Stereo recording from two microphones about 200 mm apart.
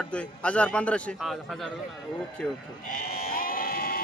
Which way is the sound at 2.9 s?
45° left (ahead or behind).